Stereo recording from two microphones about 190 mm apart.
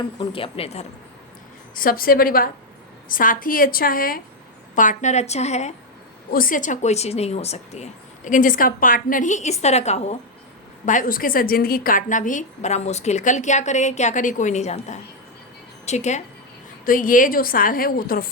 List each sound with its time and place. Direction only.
0.2 s a woman's voice: 30° left (ahead or behind)
1.7 s a woman's voice: 50° left (ahead or behind)
6.3 s a woman's voice: 45° left (ahead or behind)